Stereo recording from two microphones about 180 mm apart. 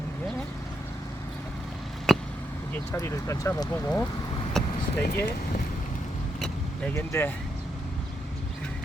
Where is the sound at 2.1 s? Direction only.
Centre (ahead or behind).